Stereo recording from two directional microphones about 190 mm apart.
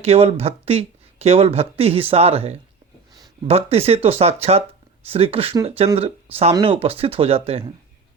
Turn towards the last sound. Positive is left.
turn(degrees=-30)  # may be behind; listen again after turning